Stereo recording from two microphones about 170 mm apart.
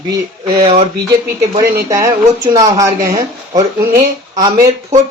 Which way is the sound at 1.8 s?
20° right (ahead or behind).